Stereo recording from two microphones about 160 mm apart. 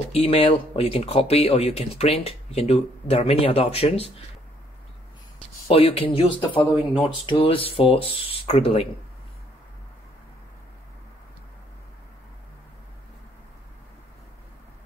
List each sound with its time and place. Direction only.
0.1 s speech: 35° left (ahead or behind)
5.7 s speech: 35° left (ahead or behind)